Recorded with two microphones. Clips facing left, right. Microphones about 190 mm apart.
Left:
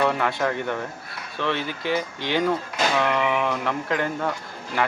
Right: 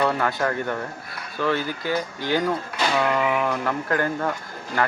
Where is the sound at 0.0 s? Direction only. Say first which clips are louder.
Even; centre (ahead or behind).